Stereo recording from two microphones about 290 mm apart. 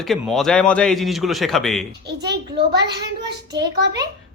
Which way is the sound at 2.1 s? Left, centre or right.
Right.